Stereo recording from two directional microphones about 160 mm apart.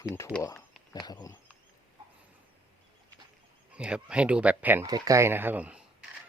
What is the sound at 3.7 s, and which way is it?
Speech, 5° right (ahead or behind).